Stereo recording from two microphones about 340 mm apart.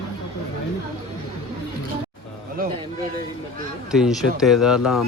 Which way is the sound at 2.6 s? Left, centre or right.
Right.